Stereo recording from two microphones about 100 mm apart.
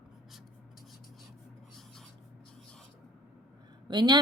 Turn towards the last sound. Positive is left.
turn(degrees=-50)  # may be behind; listen again after turning